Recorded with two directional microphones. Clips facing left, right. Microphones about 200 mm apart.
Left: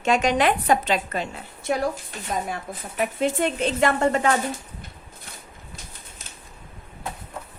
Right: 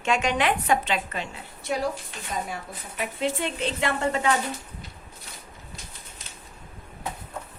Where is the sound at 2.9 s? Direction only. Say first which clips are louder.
Left 5 dB; 45° left (ahead or behind).